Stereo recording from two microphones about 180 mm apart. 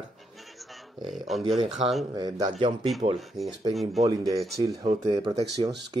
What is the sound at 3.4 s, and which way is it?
Speech, centre (ahead or behind).